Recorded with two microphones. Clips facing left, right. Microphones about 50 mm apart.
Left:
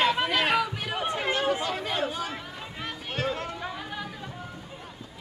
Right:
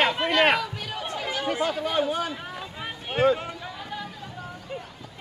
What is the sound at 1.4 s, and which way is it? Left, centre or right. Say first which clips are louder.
Chatter: right 1 dB; right.